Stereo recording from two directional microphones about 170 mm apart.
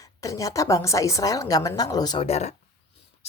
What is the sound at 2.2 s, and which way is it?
Speech, 40° left (ahead or behind).